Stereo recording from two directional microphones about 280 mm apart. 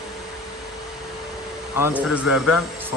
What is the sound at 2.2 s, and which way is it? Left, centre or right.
Speech, centre.